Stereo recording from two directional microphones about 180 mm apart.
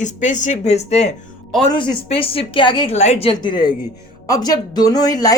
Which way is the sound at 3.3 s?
25° left (ahead or behind).